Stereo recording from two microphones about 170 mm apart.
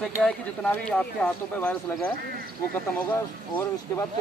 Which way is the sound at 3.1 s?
15° left (ahead or behind).